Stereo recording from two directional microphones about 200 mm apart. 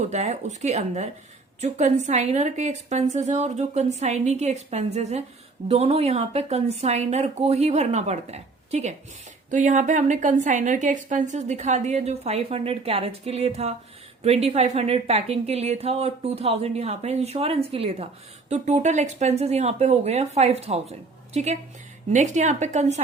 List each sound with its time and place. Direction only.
0.0 s a woman's voice: 35° right (ahead or behind)